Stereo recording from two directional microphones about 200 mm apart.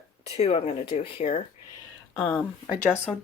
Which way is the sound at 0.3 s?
30° left (ahead or behind).